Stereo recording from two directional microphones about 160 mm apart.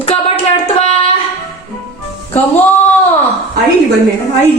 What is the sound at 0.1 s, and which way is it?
Music, 40° left (ahead or behind).